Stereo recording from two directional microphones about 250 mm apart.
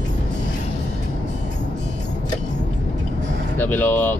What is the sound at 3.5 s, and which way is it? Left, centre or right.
Speech, centre.